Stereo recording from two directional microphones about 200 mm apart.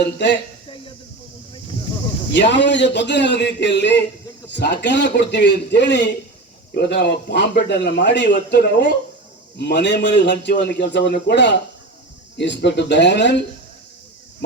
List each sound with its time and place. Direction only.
2.3 s a man's voice: 60° left (ahead or behind)